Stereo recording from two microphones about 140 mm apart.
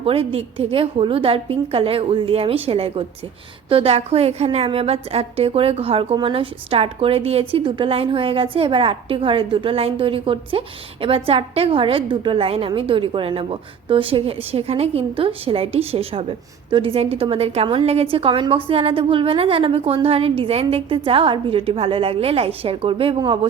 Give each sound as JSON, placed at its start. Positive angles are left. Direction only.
{"t": 0.0, "sound": "a woman's voice", "side_deg": -40}